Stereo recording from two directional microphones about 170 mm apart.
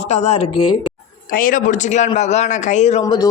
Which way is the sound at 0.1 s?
40° left (ahead or behind).